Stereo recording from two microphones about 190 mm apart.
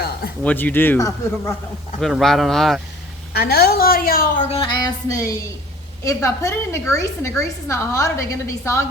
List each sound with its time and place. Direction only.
0.4 s a woman's voice: 10° left (ahead or behind)
2.0 s speech: centre (ahead or behind)
3.3 s a woman's voice: 55° left (ahead or behind)
4.4 s a sound: 30° left (ahead or behind)
6.1 s a woman's voice: 15° left (ahead or behind)